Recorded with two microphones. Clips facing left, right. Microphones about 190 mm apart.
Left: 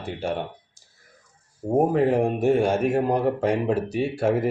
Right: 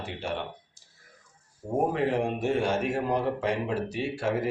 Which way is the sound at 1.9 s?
45° left (ahead or behind).